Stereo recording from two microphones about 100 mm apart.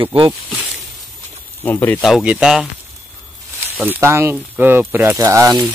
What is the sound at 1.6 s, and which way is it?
Speech, 20° left (ahead or behind).